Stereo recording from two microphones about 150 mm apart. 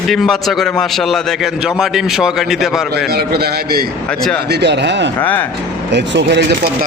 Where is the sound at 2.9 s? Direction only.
90° right.